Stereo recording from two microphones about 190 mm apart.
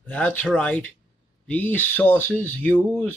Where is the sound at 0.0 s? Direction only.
10° left (ahead or behind).